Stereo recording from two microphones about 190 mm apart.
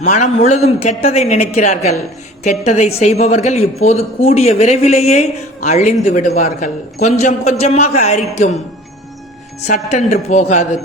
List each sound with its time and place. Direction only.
0.0 s a man's voice: 40° left (ahead or behind)
9.6 s a man's voice: 35° left (ahead or behind)